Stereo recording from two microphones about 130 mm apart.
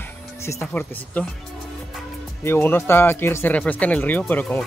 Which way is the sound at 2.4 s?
15° left (ahead or behind).